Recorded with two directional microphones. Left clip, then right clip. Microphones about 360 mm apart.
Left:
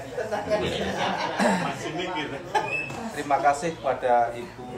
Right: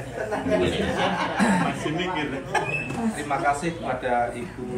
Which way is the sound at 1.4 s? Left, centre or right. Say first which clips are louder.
Even; left.